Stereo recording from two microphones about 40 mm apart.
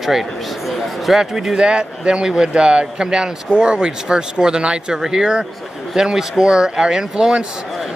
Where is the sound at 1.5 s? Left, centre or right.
Right.